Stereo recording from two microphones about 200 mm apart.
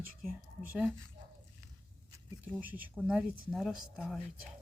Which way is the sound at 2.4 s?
10° right (ahead or behind).